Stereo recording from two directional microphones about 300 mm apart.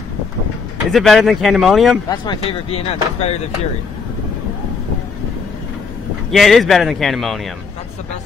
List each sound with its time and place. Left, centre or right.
0.9 s a man's voice: centre
2.0 s speech: centre
6.3 s a man's voice: centre